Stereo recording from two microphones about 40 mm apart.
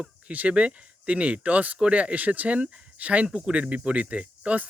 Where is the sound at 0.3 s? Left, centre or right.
Right.